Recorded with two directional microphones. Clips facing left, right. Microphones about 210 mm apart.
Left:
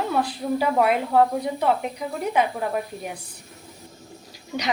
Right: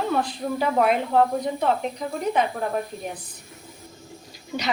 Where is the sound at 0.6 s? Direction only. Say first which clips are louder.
Even; 5° left (ahead or behind).